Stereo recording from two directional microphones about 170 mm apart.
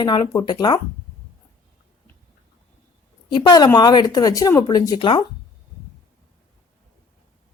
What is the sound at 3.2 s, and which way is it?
Speech, 25° left (ahead or behind).